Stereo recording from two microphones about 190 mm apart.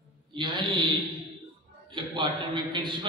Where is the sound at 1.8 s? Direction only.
25° right (ahead or behind).